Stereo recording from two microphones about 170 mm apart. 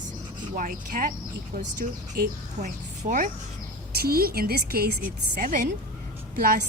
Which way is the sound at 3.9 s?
65° right (ahead or behind).